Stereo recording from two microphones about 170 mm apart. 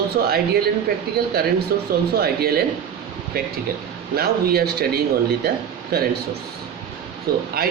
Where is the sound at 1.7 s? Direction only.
60° right (ahead or behind).